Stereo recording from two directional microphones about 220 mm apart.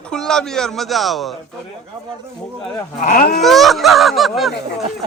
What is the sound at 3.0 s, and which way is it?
Speech, 40° left (ahead or behind).